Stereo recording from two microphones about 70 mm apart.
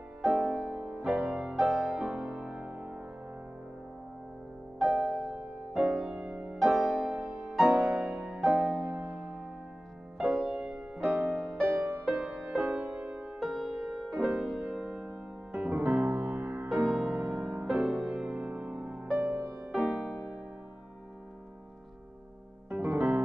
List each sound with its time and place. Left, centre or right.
0.2 s music: centre
2.7 s music: centre
4.7 s music: centre; by 13.3 s right
13.4 s music: centre
14.1 s music: centre
15.7 s music: right
16.6 s music: centre
19.1 s music: right
19.7 s music: centre
22.7 s music: right